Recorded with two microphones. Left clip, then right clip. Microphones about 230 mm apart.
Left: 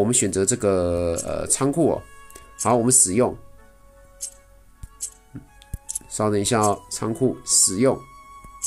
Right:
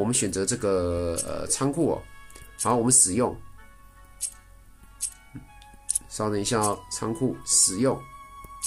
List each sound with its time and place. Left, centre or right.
0.0 s speech: centre
6.0 s speech: left